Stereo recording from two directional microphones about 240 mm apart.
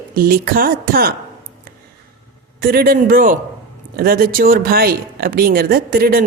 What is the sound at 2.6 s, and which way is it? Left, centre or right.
Speech, right.